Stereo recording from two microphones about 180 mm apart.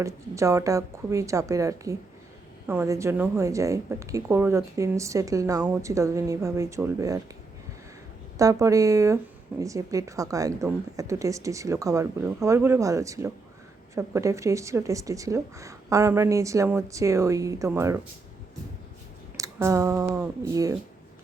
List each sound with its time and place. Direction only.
0.0 s speech: 15° right (ahead or behind)
8.4 s speech: 20° right (ahead or behind)
19.4 s a sound: 15° right (ahead or behind)
20.1 s speech: 15° right (ahead or behind)